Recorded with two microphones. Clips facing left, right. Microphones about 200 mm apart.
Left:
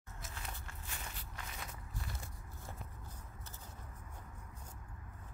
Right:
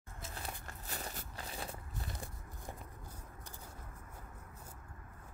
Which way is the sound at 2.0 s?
15° right (ahead or behind).